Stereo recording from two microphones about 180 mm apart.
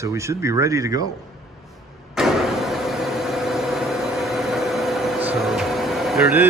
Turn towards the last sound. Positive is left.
turn(degrees=0)  # may be behind; listen again after turning